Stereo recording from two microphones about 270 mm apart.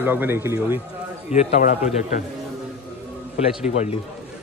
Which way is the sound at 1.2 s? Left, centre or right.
Left.